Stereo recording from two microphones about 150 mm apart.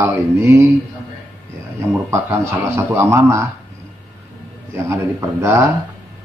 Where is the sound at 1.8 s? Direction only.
20° right (ahead or behind).